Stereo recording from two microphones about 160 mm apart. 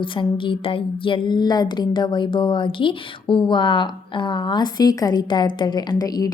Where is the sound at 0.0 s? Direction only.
30° left (ahead or behind).